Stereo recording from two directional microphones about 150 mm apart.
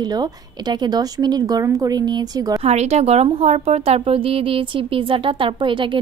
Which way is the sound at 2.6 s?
45° right (ahead or behind).